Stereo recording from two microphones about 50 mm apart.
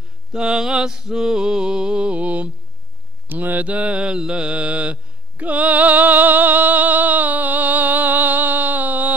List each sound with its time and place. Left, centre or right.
0.3 s a sound: centre
3.3 s mantra: right
5.4 s music: right